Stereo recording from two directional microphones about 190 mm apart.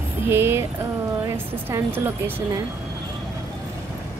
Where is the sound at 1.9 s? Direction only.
10° right (ahead or behind).